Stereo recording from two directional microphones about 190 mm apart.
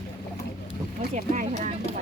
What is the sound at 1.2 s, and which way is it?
Speech, 40° right (ahead or behind).